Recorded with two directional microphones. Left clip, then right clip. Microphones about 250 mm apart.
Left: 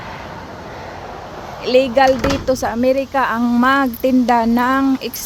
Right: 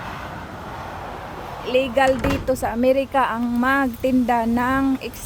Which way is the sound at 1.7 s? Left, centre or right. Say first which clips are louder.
Left 6 dB; left.